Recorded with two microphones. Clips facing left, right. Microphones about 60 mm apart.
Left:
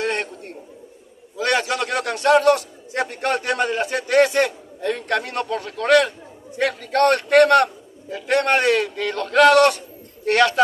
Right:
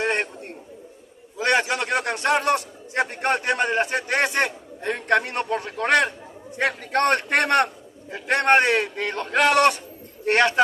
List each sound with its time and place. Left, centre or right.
0.0 s chatter: right
1.4 s a man's voice: right